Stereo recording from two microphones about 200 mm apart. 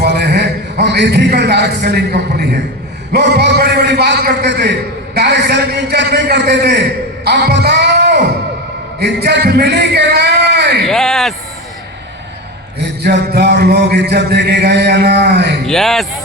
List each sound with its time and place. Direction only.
0.0 s a man's voice: 55° right (ahead or behind)
3.1 s a man's voice: 55° right (ahead or behind)
10.8 s a sound: centre (ahead or behind)
13.0 s music: 55° right (ahead or behind)
15.6 s speech: centre (ahead or behind)